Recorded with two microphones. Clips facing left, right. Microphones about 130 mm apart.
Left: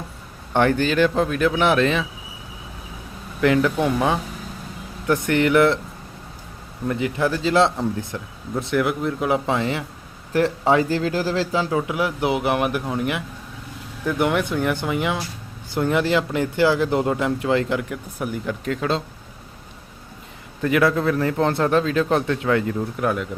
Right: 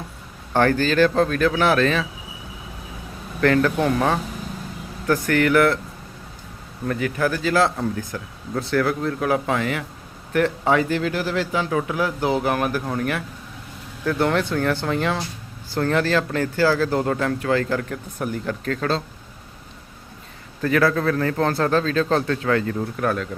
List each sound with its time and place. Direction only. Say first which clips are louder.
0.5 s speech: even; 15° left (ahead or behind)
3.4 s speech: even; 15° left (ahead or behind)
5.0 s speech: even; 20° left (ahead or behind)
6.8 s speech: left 1 dB; 20° left (ahead or behind)
11.9 s speech: even; 20° left (ahead or behind)
20.6 s speech: left 1 dB; 15° left (ahead or behind)